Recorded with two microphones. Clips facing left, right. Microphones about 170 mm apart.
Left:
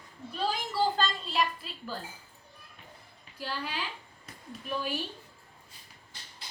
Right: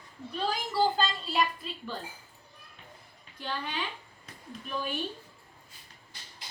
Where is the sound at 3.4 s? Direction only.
5° left (ahead or behind).